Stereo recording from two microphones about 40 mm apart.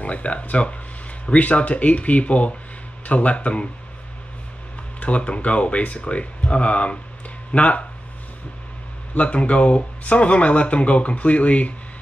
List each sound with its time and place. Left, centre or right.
0.0 s speech: left
5.0 s speech: left
9.1 s speech: left